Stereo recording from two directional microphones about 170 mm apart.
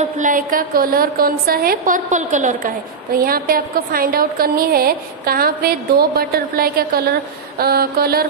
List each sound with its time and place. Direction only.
0.2 s a woman's voice: 55° right (ahead or behind)
3.2 s a woman's voice: 60° right (ahead or behind)